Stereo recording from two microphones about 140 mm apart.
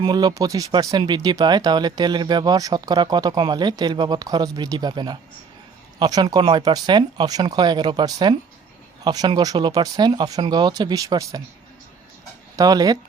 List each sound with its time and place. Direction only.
0.0 s speech: 30° right (ahead or behind)
12.5 s speech: 30° right (ahead or behind)